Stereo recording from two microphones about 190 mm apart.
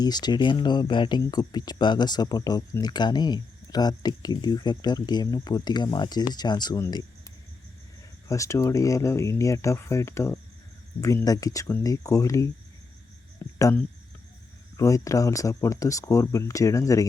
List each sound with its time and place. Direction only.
0.0 s speech: 20° left (ahead or behind)
8.3 s speech: 15° left (ahead or behind)
13.4 s a sound: 15° left (ahead or behind)
14.8 s speech: 15° left (ahead or behind)